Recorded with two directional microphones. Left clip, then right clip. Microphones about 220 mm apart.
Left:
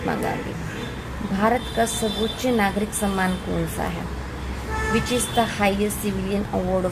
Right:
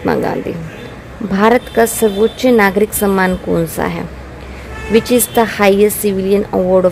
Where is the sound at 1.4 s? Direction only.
45° right (ahead or behind).